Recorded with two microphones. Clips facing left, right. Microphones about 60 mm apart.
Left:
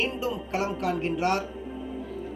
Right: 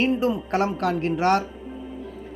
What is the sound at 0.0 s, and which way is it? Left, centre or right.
Speech, right.